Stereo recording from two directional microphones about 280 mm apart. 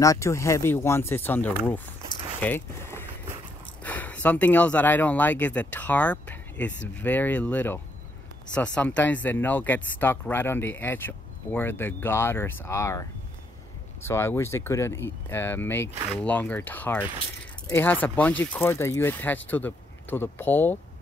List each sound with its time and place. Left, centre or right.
0.0 s speech: centre
1.6 s a sound: centre
3.8 s speech: centre
14.0 s speech: centre